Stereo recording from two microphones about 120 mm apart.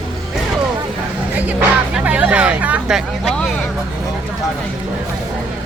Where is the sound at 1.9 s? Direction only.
10° right (ahead or behind).